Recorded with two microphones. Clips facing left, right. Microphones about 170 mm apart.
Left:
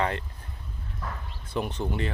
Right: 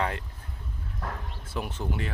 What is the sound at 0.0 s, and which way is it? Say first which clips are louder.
Speech: left 2 dB; 5° right (ahead or behind).